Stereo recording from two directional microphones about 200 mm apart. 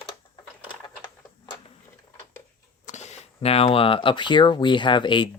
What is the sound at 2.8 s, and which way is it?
Speech, 35° left (ahead or behind).